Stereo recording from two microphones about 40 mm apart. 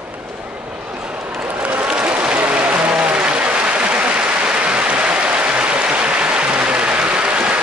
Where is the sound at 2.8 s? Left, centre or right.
Right.